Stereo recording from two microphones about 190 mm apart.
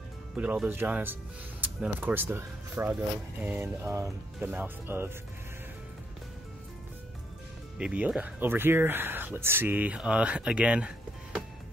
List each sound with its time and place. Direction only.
0.4 s speech: 5° right (ahead or behind)
7.8 s speech: 5° right (ahead or behind)